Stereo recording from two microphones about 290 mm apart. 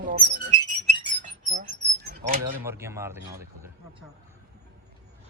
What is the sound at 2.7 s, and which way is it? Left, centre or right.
Speech, centre.